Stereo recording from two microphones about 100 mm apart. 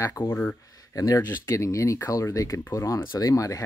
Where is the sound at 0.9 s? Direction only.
35° left (ahead or behind).